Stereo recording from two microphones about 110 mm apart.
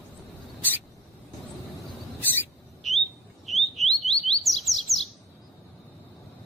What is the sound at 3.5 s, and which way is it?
Chirp, centre (ahead or behind).